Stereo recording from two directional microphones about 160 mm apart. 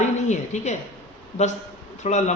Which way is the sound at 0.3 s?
45° left (ahead or behind).